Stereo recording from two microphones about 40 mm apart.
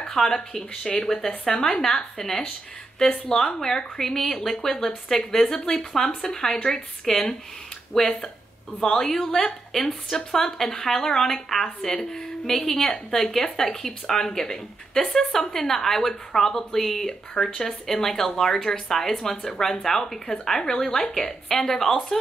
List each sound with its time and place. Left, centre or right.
0.1 s a woman's voice: centre